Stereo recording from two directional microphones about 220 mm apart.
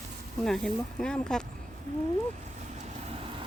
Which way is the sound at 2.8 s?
30° right (ahead or behind).